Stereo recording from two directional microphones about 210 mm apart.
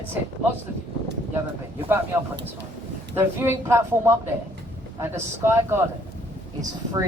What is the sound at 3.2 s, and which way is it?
A woman's voice, 10° right (ahead or behind).